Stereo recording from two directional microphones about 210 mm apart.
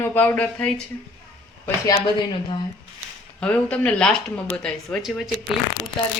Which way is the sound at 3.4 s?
5° left (ahead or behind).